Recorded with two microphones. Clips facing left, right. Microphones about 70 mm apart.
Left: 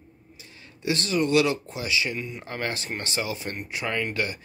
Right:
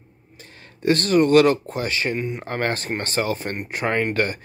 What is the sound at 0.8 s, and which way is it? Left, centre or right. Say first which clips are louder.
Speech: right 7 dB; right.